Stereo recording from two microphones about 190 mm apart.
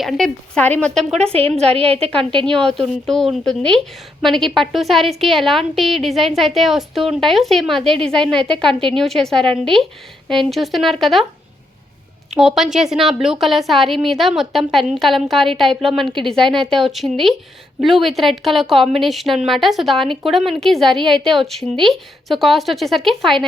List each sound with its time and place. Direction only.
0.0 s a woman's voice: centre (ahead or behind)
1.1 s a woman's voice: 30° right (ahead or behind)
2.5 s a woman's voice: 5° left (ahead or behind)
12.3 s a woman's voice: centre (ahead or behind)